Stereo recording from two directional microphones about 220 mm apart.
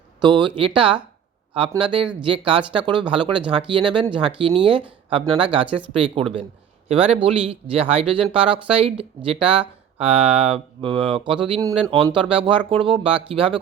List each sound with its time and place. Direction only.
0.2 s speech: 20° right (ahead or behind)